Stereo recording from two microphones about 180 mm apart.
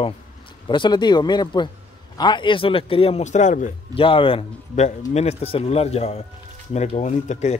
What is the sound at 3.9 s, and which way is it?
A man's voice, 30° left (ahead or behind).